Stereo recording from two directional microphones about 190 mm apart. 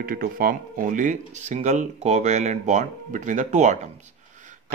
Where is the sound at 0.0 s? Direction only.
50° right (ahead or behind).